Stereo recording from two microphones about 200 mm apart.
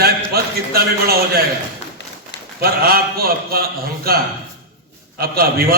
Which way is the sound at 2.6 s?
50° right (ahead or behind).